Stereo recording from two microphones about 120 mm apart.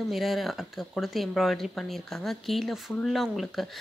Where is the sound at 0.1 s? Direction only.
Centre (ahead or behind).